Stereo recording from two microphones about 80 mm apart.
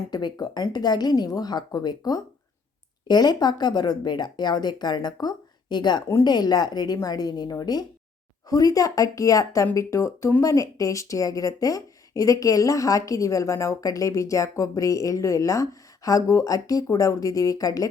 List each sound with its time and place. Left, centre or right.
0.1 s a woman's voice: left